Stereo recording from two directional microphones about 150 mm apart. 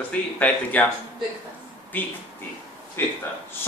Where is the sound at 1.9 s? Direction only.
10° left (ahead or behind).